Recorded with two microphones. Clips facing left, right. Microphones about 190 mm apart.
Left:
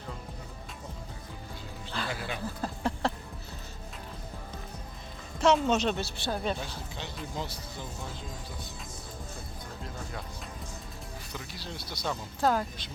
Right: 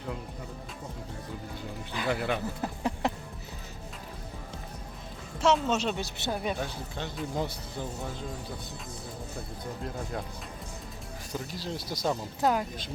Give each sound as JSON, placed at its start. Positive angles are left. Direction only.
{"t": 2.0, "sound": "speech", "side_deg": -60}
{"t": 2.6, "sound": "a sound", "side_deg": -15}
{"t": 5.4, "sound": "a woman's voice", "side_deg": -5}
{"t": 6.0, "sound": "speech", "side_deg": -15}
{"t": 6.6, "sound": "speech", "side_deg": -50}
{"t": 11.3, "sound": "speech", "side_deg": -40}
{"t": 12.4, "sound": "speech", "side_deg": -20}